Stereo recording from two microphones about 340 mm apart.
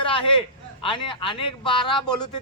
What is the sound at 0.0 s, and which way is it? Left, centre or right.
A man's voice, centre.